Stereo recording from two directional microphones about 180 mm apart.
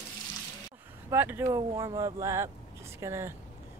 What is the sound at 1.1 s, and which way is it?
Speech, 10° right (ahead or behind).